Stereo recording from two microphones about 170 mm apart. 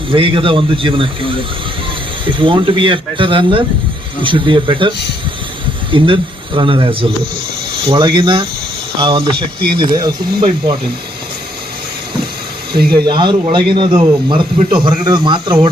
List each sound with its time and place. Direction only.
0.1 s speech: 30° right (ahead or behind)
5.9 s speech: 30° right (ahead or behind)
12.7 s speech: 65° right (ahead or behind)
13.1 s speech: 25° right (ahead or behind)